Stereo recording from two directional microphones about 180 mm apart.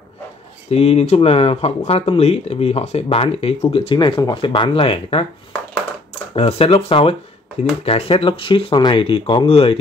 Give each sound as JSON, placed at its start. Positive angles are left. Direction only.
{"t": 0.7, "sound": "speech", "side_deg": 35}
{"t": 6.3, "sound": "speech", "side_deg": 35}